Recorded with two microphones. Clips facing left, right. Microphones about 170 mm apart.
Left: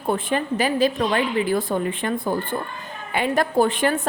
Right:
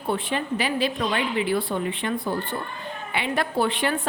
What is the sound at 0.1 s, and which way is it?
A woman's voice, 45° left (ahead or behind).